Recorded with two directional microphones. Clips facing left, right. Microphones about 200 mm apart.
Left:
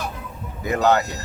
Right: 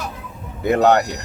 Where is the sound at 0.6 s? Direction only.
65° right (ahead or behind).